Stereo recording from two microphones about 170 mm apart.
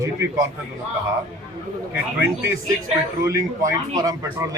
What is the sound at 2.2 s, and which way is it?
A man's voice, 15° right (ahead or behind).